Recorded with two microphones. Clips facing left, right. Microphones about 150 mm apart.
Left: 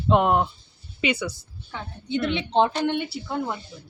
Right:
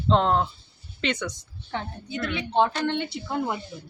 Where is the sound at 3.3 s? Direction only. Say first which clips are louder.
Right 3 dB; 10° right (ahead or behind).